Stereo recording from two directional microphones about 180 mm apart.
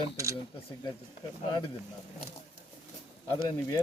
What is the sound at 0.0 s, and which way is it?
Camera, 15° right (ahead or behind).